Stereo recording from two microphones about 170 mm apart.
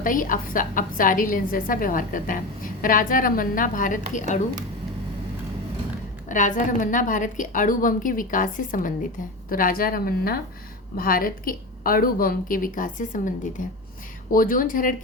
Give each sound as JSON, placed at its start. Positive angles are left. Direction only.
{"t": 0.0, "sound": "a woman's voice", "side_deg": 50}
{"t": 6.2, "sound": "a woman's voice", "side_deg": 50}